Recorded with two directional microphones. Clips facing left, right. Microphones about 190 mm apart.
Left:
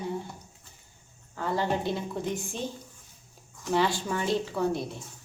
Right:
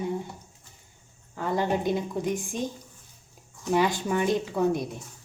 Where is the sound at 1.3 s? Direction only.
15° right (ahead or behind).